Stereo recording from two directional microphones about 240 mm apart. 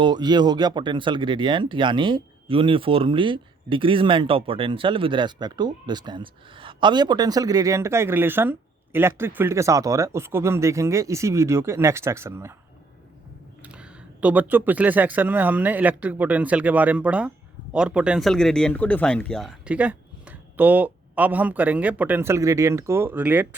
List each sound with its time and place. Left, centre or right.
0.0 s speech: centre
13.6 s speech: centre